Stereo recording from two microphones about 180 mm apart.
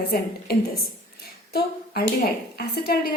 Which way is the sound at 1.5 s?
60° left (ahead or behind).